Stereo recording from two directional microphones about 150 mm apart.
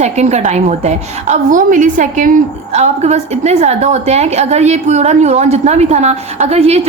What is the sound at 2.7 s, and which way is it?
A woman's voice, 45° right (ahead or behind).